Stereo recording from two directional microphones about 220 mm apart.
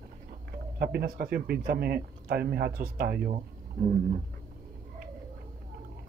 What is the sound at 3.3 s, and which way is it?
Speech, 30° right (ahead or behind).